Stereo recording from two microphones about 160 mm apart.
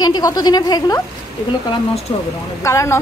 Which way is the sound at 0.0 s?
25° left (ahead or behind).